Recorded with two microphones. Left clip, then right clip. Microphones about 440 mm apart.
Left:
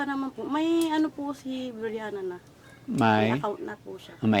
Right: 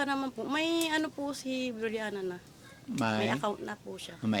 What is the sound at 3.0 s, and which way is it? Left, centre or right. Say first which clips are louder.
Speech: left 8 dB; centre.